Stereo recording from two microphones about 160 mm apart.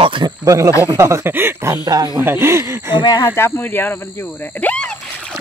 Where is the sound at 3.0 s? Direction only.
25° left (ahead or behind); by 4.9 s 5° left (ahead or behind).